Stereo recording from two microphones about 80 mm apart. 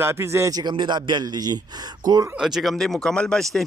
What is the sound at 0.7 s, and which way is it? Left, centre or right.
Speech, right.